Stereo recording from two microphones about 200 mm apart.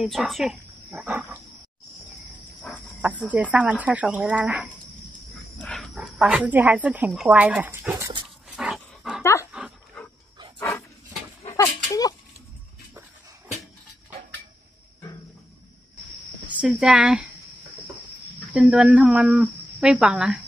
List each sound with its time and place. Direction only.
0.0 s speech: centre (ahead or behind)
2.2 s cricket: 5° left (ahead or behind)
3.0 s speech: 5° right (ahead or behind)
8.5 s dog: 5° right (ahead or behind)
9.2 s dog: 15° left (ahead or behind)
9.5 s dog: 5° right (ahead or behind)
11.4 s a sound: 15° left (ahead or behind)
16.4 s speech: 5° right (ahead or behind)
18.5 s speech: 5° right (ahead or behind)